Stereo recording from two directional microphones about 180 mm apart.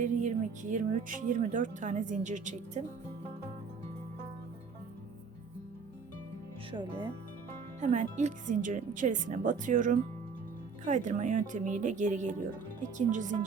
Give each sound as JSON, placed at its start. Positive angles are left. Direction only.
{"t": 0.0, "sound": "speech", "side_deg": -45}
{"t": 6.7, "sound": "speech", "side_deg": -30}
{"t": 7.8, "sound": "speech", "side_deg": -40}